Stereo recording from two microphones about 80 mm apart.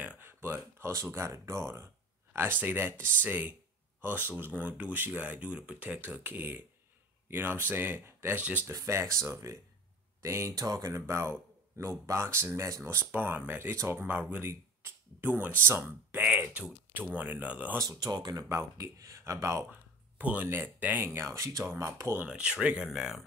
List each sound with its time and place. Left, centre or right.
0.2 s a sound: right
1.0 s speech: right
8.4 s speech: centre
8.7 s speech: right
10.5 s speech: right
11.0 s speech: right
16.2 s speech: centre
17.7 s speech: right
18.5 s speech: right
19.7 s a sound: right
20.4 s speech: right
22.2 s speech: centre